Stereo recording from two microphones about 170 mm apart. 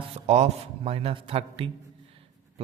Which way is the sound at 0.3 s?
40° right (ahead or behind).